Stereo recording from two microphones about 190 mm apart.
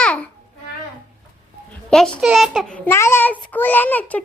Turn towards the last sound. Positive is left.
turn(degrees=10)  # may be behind; listen again after turning